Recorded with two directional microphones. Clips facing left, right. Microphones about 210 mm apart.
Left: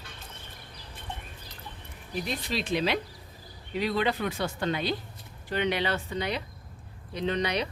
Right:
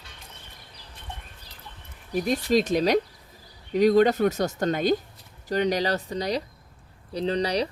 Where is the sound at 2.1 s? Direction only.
45° right (ahead or behind).